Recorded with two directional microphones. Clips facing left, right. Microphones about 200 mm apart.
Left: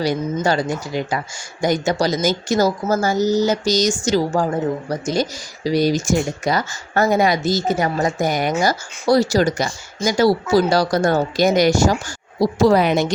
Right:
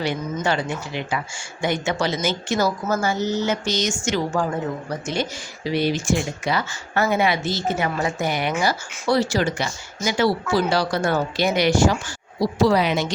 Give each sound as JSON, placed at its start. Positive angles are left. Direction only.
{"t": 0.0, "sound": "speech", "side_deg": 40}